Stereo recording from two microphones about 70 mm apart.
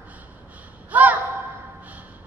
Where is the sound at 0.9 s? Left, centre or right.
Right.